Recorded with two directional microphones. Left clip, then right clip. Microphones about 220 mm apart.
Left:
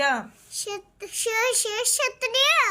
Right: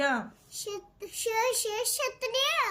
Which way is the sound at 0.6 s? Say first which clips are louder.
Left 5 dB; 5° right (ahead or behind).